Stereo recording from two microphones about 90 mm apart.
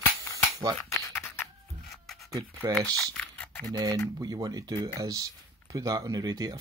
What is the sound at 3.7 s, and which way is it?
Speech, 45° right (ahead or behind).